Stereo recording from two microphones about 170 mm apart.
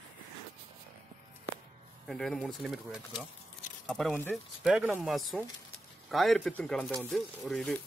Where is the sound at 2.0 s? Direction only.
5° left (ahead or behind).